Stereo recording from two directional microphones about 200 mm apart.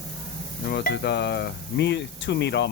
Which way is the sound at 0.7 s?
55° left (ahead or behind).